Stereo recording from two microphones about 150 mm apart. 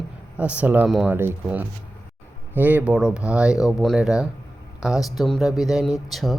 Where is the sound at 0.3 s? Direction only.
10° right (ahead or behind).